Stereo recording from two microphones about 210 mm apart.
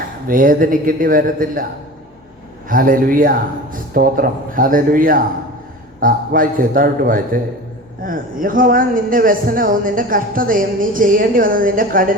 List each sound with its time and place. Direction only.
0.3 s a man's voice: 40° right (ahead or behind)
2.6 s a man's voice: 40° right (ahead or behind)